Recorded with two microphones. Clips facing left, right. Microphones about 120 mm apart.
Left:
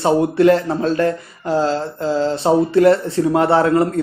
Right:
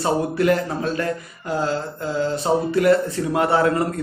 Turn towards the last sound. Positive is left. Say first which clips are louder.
# left 4 dB
turn(degrees=30)  # may be behind; listen again after turning